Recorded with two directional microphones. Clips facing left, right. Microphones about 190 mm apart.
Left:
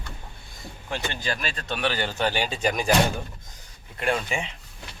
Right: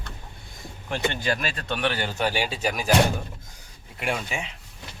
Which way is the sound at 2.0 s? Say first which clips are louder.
Even; 10° right (ahead or behind).